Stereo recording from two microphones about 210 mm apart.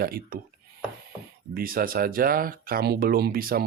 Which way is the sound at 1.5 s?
45° right (ahead or behind).